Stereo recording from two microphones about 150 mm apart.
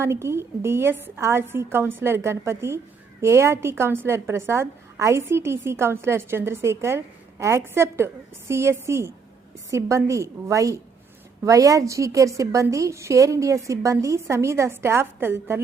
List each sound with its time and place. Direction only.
0.0 s a woman's voice: 15° right (ahead or behind)